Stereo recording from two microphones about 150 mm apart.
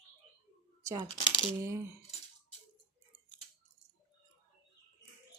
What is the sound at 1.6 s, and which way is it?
Speech, 20° right (ahead or behind).